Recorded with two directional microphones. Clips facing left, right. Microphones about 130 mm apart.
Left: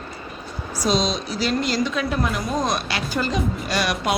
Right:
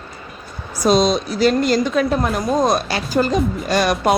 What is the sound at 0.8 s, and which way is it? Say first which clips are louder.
A woman's voice: right 7 dB; 50° right (ahead or behind).